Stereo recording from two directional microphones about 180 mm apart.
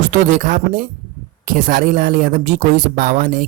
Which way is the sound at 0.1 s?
45° right (ahead or behind).